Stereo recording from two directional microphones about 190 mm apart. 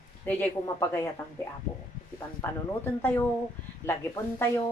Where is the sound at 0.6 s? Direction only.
15° left (ahead or behind).